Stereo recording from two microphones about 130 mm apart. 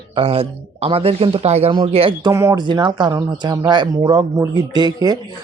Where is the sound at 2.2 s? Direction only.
25° right (ahead or behind).